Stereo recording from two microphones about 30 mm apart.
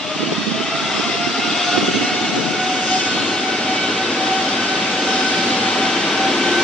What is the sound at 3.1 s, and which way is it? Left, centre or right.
Vehicle, left.